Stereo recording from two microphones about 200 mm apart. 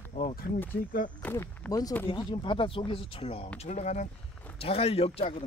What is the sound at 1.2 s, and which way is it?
Speech, 10° left (ahead or behind).